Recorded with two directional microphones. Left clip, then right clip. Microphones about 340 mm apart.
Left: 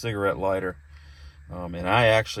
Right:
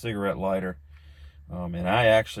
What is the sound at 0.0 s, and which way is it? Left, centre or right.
Speech, left.